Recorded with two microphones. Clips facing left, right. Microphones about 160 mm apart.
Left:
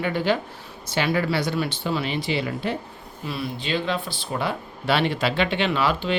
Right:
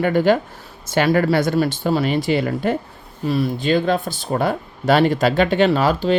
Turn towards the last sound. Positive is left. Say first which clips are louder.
# right 6 dB
turn(degrees=-40)  # may be behind; listen again after turning